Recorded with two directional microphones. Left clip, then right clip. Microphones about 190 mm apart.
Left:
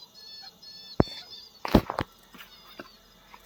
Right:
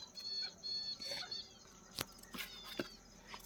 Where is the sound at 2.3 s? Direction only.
40° right (ahead or behind).